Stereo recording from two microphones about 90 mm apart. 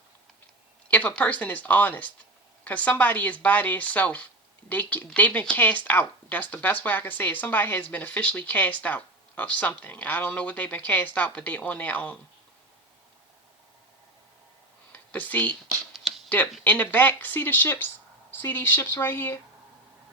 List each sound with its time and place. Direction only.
0.9 s speech: 15° left (ahead or behind)
14.9 s speech: 20° left (ahead or behind)
15.9 s a sound: centre (ahead or behind)
16.6 s speech: 20° left (ahead or behind)